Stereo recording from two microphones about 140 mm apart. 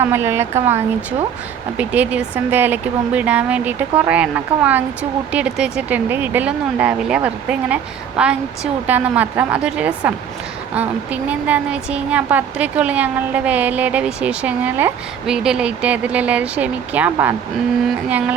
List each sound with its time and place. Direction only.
0.0 s a woman's voice: 15° right (ahead or behind)
1.8 s a woman's voice: 10° right (ahead or behind)